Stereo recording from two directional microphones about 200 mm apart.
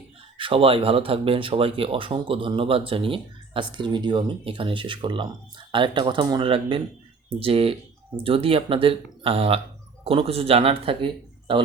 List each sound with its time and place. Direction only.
0.3 s speech: 25° right (ahead or behind)